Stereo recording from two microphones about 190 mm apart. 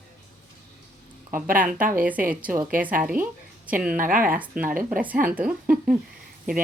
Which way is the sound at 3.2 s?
45° right (ahead or behind).